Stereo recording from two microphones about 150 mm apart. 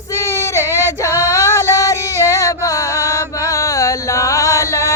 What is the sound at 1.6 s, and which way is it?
Chant, 20° left (ahead or behind).